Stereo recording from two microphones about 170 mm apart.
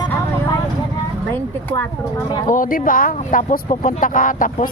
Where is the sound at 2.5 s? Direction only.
55° left (ahead or behind).